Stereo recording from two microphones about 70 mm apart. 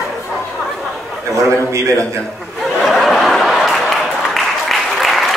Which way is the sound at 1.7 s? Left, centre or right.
Right.